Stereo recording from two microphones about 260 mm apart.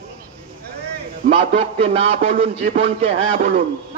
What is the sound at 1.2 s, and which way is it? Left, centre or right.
A man's voice, right.